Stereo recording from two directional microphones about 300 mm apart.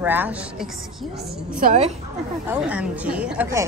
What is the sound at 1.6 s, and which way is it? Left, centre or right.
Speech, right.